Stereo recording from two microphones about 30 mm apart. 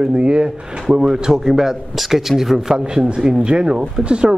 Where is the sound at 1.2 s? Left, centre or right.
Centre.